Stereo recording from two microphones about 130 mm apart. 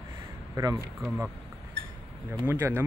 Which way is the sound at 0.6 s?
25° right (ahead or behind).